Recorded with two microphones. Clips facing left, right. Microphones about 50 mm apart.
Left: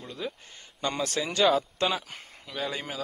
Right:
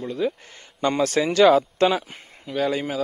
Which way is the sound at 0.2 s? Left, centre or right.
Centre.